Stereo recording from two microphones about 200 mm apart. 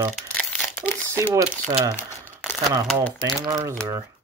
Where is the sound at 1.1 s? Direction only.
15° right (ahead or behind).